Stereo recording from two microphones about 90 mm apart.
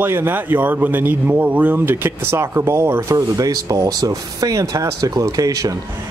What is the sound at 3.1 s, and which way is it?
Speech, 40° right (ahead or behind).